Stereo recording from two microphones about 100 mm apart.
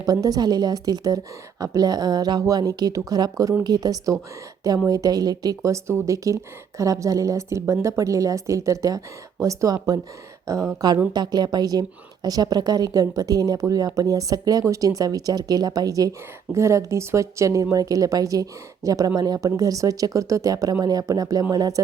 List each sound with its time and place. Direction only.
0.0 s speech: 40° right (ahead or behind)